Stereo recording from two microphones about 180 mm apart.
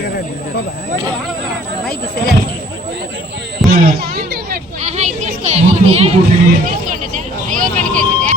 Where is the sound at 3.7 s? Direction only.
60° right (ahead or behind).